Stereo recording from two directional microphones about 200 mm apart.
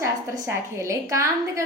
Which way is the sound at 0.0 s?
15° right (ahead or behind).